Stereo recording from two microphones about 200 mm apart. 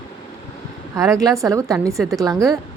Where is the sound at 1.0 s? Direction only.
15° right (ahead or behind).